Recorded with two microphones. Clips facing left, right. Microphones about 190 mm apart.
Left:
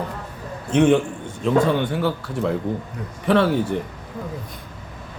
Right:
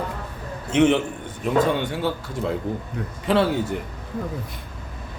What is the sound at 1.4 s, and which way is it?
Speech, 20° right (ahead or behind).